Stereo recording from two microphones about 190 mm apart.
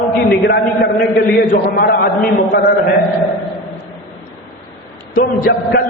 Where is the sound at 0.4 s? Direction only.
60° left (ahead or behind).